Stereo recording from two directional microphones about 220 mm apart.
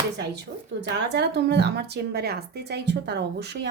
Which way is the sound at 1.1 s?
50° right (ahead or behind).